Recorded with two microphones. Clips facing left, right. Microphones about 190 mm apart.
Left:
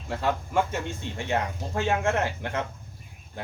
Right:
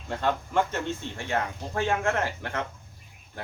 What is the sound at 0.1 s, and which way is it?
Speech, 5° left (ahead or behind).